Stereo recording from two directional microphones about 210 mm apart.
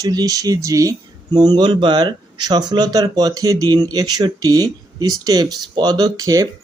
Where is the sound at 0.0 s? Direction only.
15° right (ahead or behind).